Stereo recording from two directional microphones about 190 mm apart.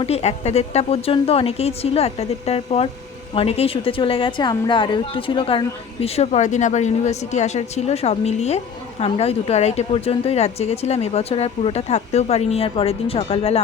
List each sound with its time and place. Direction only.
0.0 s a woman's voice: 35° left (ahead or behind)